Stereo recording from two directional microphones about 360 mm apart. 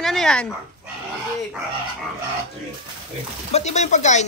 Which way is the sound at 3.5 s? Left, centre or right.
Centre.